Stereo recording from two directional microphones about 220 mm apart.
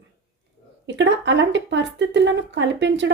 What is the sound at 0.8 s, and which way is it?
A woman's voice, 55° right (ahead or behind).